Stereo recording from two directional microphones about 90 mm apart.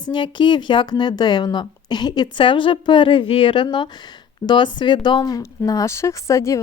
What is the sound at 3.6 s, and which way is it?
Speech, 55° left (ahead or behind).